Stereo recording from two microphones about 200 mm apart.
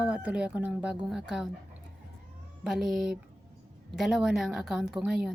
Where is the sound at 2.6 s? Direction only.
Centre (ahead or behind).